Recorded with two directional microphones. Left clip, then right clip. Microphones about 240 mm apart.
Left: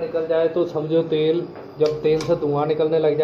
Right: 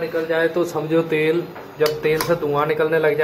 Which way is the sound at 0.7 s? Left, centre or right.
Right.